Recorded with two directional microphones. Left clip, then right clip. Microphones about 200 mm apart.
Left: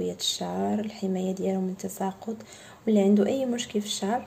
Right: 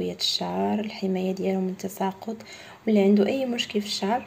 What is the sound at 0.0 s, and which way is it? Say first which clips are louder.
Speech: right 3 dB; 5° left (ahead or behind).